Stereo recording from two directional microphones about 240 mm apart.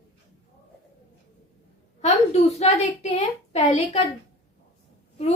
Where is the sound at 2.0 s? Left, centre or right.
Left.